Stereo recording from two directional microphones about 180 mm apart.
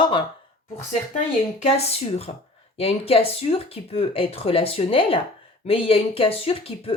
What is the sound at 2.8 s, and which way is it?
Speech, 35° left (ahead or behind).